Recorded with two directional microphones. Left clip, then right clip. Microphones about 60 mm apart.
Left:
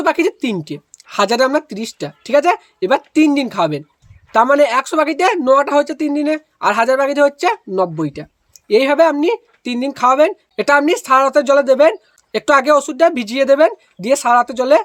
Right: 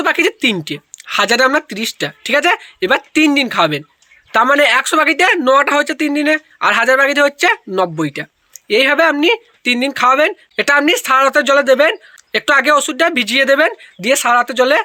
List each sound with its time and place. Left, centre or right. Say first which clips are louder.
0.0 s speech: right 2 dB; left
8.6 s speech: even; left